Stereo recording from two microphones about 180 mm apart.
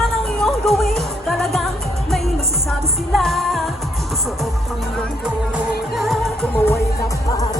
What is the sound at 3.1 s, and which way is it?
Music, centre (ahead or behind).